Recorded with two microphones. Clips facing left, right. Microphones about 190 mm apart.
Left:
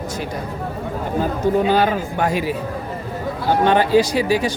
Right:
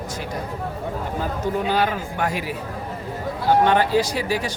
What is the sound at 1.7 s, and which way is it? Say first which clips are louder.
Speech: left 5 dB; 30° left (ahead or behind).